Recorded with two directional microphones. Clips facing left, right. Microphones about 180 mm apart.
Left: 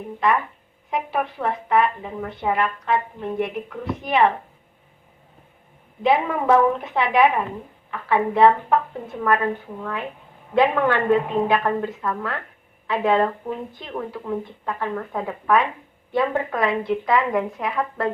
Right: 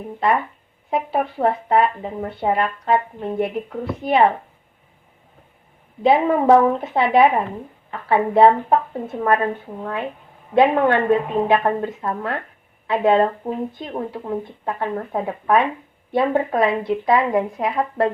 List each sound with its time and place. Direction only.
0.9 s speech: 30° right (ahead or behind)
6.0 s speech: 30° right (ahead or behind)